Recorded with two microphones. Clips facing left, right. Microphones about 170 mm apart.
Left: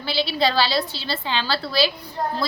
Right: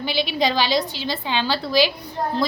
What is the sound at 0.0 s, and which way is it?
A woman's voice, 15° right (ahead or behind).